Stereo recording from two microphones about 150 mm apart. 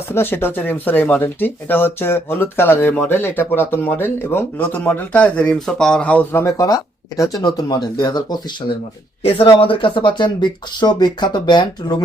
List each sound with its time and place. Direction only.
0.1 s speech: 15° left (ahead or behind)